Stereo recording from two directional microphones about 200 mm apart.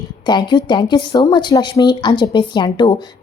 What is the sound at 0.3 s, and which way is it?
A woman's voice, 20° left (ahead or behind).